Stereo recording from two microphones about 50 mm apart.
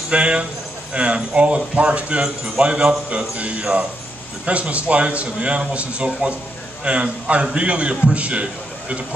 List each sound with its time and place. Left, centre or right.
0.1 s a man's voice: right